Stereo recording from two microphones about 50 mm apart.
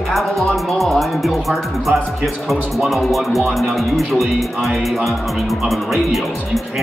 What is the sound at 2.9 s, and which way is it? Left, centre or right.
Speech, centre.